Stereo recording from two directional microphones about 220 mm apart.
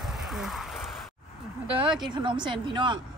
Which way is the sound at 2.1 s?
20° right (ahead or behind).